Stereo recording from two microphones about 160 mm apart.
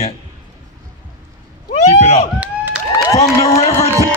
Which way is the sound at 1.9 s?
40° left (ahead or behind).